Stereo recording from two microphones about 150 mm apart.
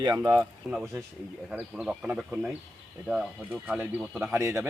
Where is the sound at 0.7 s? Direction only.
5° right (ahead or behind).